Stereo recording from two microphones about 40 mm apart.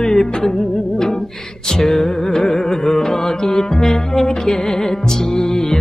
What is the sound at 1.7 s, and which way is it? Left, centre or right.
Music, centre.